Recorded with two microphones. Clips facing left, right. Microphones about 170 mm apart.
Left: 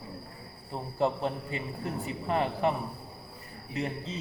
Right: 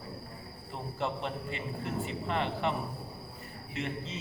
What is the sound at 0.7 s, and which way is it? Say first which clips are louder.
A man's voice: left 6 dB; 35° left (ahead or behind).